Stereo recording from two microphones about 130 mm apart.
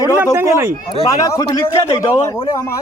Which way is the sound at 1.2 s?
25° left (ahead or behind).